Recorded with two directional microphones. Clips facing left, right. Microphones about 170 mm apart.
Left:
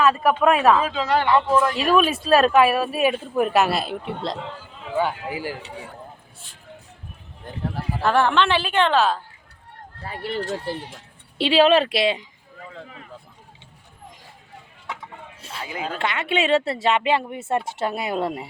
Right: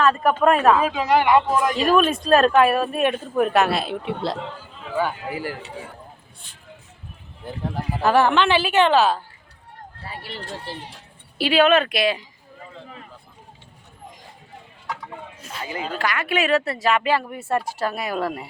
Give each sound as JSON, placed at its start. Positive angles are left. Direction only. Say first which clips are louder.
{"t": 0.0, "sound": "speech", "louder": "even", "side_deg": 5}
{"t": 0.7, "sound": "speech", "louder": "right 1 dB", "side_deg": -10}
{"t": 1.7, "sound": "speech", "louder": "right 1 dB", "side_deg": 5}
{"t": 4.9, "sound": "a man's voice", "louder": "left 1 dB", "side_deg": 15}
{"t": 7.4, "sound": "speech", "louder": "right 1 dB", "side_deg": -5}
{"t": 10.1, "sound": "speech", "louder": "left 8 dB", "side_deg": 50}
{"t": 11.3, "sound": "a woman's voice", "louder": "left 1 dB", "side_deg": 25}
{"t": 15.6, "sound": "a man's voice", "louder": "right 1 dB", "side_deg": 10}
{"t": 16.0, "sound": "a woman's voice", "louder": "even", "side_deg": 25}